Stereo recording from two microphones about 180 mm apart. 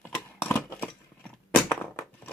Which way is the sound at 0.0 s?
10° left (ahead or behind).